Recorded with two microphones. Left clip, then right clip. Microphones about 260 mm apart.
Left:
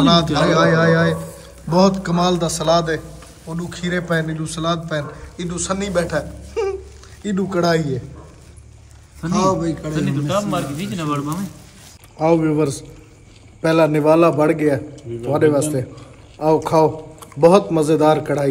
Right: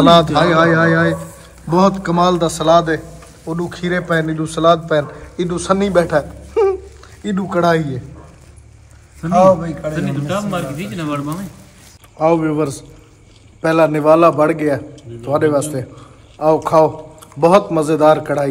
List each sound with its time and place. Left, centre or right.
0.0 s a man's voice: centre
9.9 s a man's voice: left
12.2 s a man's voice: centre